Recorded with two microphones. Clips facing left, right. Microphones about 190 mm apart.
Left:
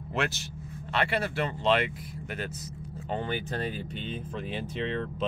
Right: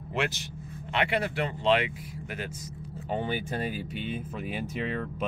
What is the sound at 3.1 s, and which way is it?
Speech, 10° right (ahead or behind).